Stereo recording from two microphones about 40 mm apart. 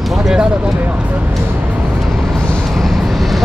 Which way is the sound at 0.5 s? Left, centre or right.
Right.